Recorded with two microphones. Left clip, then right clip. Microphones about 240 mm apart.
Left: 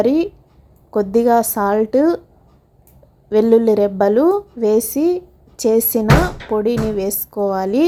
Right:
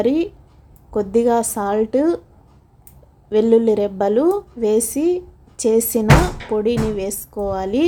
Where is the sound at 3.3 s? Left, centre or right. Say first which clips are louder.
Left 2 dB; centre.